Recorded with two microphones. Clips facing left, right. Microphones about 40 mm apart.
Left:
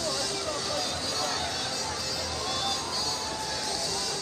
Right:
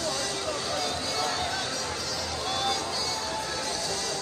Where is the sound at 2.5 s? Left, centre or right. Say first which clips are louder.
Right 4 dB; right.